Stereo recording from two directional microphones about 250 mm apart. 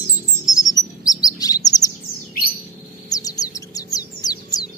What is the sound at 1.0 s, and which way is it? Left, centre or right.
Chirp, centre.